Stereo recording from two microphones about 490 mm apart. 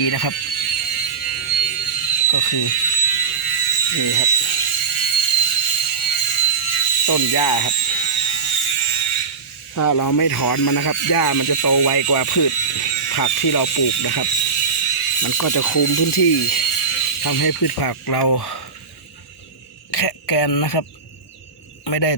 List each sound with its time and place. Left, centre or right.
0.1 s speech: left
0.3 s a sound: left
2.2 s speech: left
2.6 s a sound: left
7.3 s speech: left
7.7 s a sound: left
9.7 s speech: left
14.6 s mechanisms: left
15.4 s speech: left
16.0 s speech: left
17.2 s speech: left
20.1 s speech: left
21.8 s cricket: left